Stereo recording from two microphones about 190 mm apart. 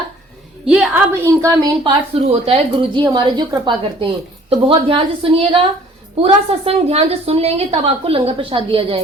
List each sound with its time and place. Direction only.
0.6 s a woman's voice: 5° right (ahead or behind)
1.8 s a woman's voice: 30° right (ahead or behind)